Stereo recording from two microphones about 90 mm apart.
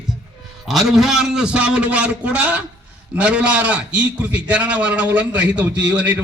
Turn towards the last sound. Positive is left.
turn(degrees=-15)  # may be behind; listen again after turning